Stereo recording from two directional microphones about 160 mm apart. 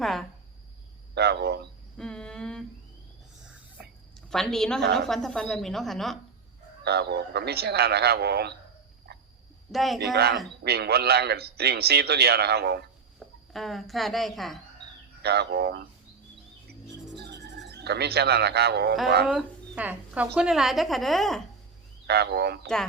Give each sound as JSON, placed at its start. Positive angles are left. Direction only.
{"t": 0.0, "sound": "speech", "side_deg": 0}
{"t": 1.1, "sound": "cricket", "side_deg": -90}
{"t": 2.0, "sound": "a sound", "side_deg": 5}
{"t": 4.3, "sound": "speech", "side_deg": 0}
{"t": 6.8, "sound": "a man's voice", "side_deg": -90}
{"t": 9.1, "sound": "a sound", "side_deg": -90}
{"t": 9.7, "sound": "speech", "side_deg": 0}
{"t": 10.0, "sound": "a man's voice", "side_deg": -90}
{"t": 13.1, "sound": "speech", "side_deg": 0}
{"t": 15.2, "sound": "a man's voice", "side_deg": -90}
{"t": 17.2, "sound": "a sound", "side_deg": -90}
{"t": 19.3, "sound": "speech", "side_deg": -5}
{"t": 22.0, "sound": "a man's voice", "side_deg": -90}